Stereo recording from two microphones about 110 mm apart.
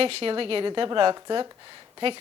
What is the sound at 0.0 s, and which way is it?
Speech, 55° right (ahead or behind).